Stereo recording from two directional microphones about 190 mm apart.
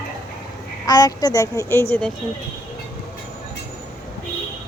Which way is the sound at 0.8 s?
20° left (ahead or behind).